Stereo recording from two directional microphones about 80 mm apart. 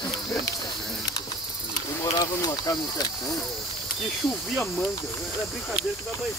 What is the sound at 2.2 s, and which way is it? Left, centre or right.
Speech, left.